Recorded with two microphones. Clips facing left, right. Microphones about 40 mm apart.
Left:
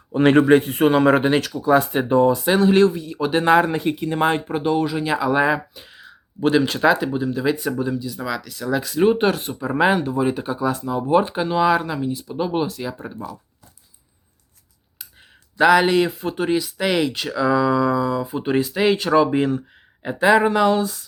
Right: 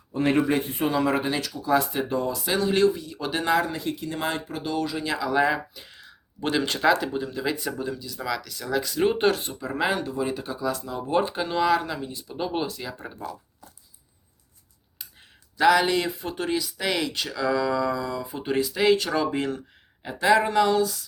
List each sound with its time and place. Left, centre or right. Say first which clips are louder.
0.1 s speech: left 9 dB; left
1.7 s speech: left 7 dB; left
2.8 s speech: left 4 dB; centre
3.4 s speech: left 7 dB; left; by 5.8 s centre
5.8 s speech: left 4 dB; centre
9.5 s speech: left 7 dB; centre
15.6 s speech: left 5 dB; centre
18.9 s speech: left 6 dB; centre